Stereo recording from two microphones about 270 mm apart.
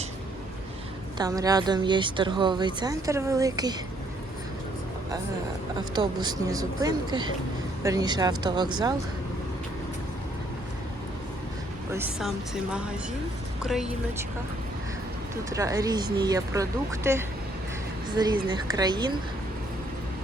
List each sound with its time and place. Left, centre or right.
1.2 s speech: centre
5.9 s speech: centre
11.9 s speech: centre
13.6 s speech: centre
15.4 s speech: centre